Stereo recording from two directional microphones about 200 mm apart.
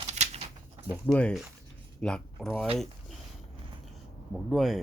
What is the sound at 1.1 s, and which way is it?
Speech, 5° left (ahead or behind).